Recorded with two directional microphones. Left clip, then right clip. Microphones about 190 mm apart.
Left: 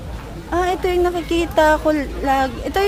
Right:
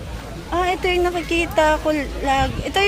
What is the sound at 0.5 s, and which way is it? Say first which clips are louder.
Speech: left 1 dB; 20° left (ahead or behind).